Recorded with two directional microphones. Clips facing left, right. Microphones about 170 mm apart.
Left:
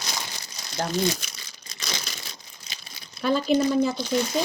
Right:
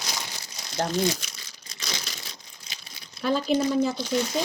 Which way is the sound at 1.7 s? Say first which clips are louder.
Left 1 dB; 55° left (ahead or behind).